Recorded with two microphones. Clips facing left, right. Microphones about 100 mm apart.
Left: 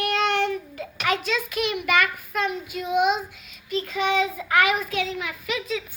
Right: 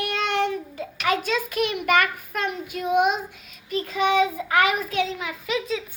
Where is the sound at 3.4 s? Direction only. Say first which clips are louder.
Even; 35° right (ahead or behind).